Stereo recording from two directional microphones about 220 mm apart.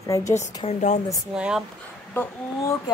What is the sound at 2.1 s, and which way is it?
Speech, 10° left (ahead or behind).